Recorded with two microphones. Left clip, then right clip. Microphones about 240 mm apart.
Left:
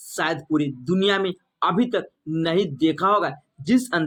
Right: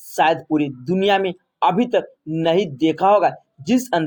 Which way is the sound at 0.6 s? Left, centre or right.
Centre.